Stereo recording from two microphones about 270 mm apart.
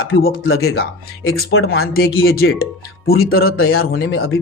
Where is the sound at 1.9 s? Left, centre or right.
Left.